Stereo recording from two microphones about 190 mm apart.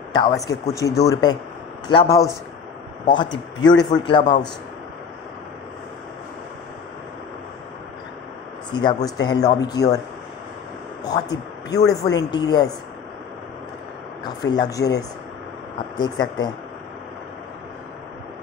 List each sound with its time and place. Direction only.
0.1 s speech: 20° left (ahead or behind)
8.7 s speech: 25° left (ahead or behind)
11.1 s speech: 20° left (ahead or behind)
14.2 s speech: 20° left (ahead or behind)